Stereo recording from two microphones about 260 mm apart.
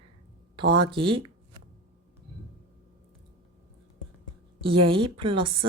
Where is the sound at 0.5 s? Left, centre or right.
Centre.